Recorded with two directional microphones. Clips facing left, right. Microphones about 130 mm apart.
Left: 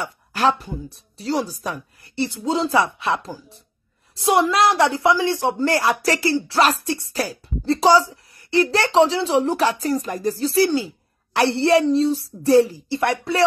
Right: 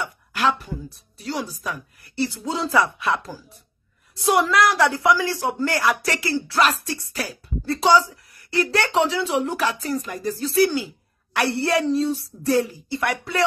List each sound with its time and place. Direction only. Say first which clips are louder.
0.0 s a woman's voice: left 3 dB; 35° left (ahead or behind)
2.1 s a woman's voice: left 3 dB; 20° left (ahead or behind)